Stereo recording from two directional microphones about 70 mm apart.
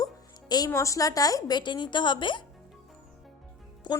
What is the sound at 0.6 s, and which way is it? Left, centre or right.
A woman's voice, left.